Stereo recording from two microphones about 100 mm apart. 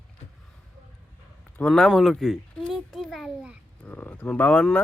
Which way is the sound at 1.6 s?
5° left (ahead or behind).